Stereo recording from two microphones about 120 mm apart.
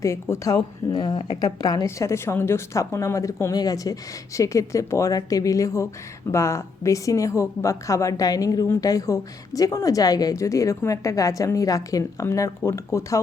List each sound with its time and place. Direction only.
0.0 s speech: 25° left (ahead or behind)